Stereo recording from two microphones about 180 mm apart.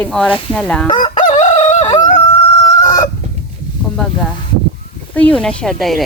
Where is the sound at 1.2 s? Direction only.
45° left (ahead or behind).